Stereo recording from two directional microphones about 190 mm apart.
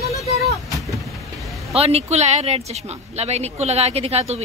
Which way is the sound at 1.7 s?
30° right (ahead or behind).